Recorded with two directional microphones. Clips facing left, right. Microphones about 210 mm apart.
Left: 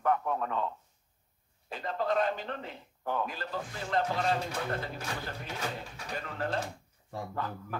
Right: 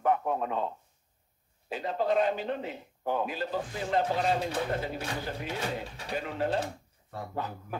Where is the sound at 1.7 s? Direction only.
10° right (ahead or behind).